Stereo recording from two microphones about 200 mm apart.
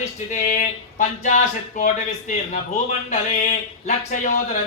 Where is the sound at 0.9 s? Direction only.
40° left (ahead or behind).